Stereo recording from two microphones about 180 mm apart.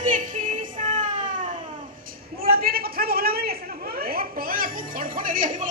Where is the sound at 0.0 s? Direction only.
45° right (ahead or behind).